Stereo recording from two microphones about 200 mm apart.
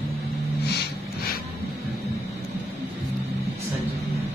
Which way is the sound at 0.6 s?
50° left (ahead or behind).